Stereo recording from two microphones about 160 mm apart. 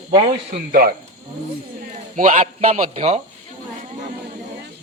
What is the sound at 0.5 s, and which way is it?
Speech, 70° right (ahead or behind).